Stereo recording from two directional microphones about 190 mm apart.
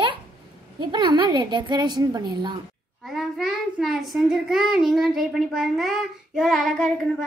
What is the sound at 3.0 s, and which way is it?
A child's voice, centre (ahead or behind).